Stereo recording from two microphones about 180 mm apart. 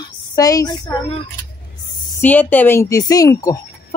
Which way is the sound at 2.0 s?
10° left (ahead or behind).